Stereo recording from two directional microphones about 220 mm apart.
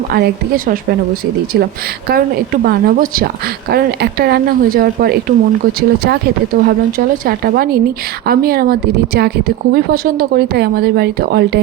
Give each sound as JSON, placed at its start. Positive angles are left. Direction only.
{"t": 0.1, "sound": "speech", "side_deg": -40}